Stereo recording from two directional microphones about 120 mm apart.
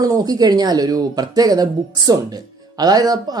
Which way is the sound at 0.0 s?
30° right (ahead or behind).